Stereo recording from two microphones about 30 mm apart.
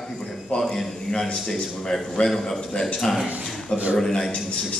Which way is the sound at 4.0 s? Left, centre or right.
Centre.